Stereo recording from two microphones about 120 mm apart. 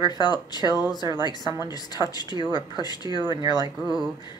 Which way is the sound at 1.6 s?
35° left (ahead or behind).